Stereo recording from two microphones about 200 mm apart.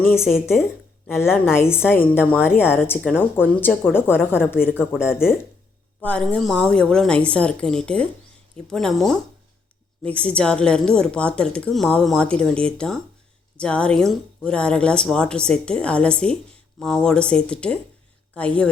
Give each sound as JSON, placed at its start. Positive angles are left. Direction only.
{"t": 0.0, "sound": "a woman's voice", "side_deg": 10}